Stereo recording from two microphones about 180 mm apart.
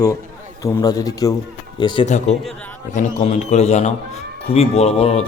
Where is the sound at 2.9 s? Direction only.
40° left (ahead or behind).